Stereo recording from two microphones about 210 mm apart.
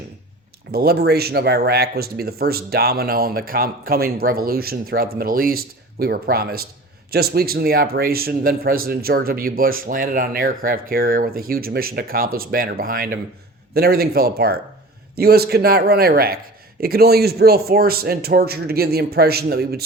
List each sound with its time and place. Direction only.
0.7 s speech: 45° right (ahead or behind)